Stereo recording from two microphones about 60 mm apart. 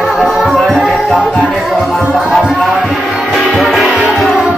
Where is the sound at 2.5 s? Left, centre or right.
Centre.